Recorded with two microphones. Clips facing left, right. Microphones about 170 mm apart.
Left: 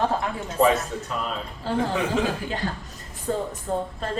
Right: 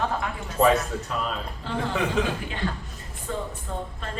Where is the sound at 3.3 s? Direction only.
40° left (ahead or behind).